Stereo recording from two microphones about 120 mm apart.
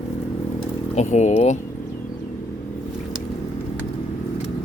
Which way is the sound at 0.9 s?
75° left (ahead or behind).